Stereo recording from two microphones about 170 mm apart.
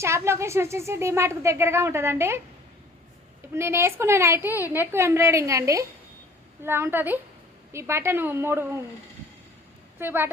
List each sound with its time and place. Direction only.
0.0 s a woman's voice: 15° right (ahead or behind)
3.5 s a woman's voice: 15° right (ahead or behind)
10.0 s a woman's voice: 10° right (ahead or behind)